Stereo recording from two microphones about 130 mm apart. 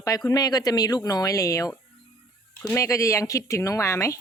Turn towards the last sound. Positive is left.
turn(degrees=20)  # may be behind; listen again after turning